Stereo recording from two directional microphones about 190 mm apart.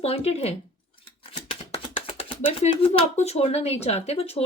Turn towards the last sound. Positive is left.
turn(degrees=30)  # may be behind; listen again after turning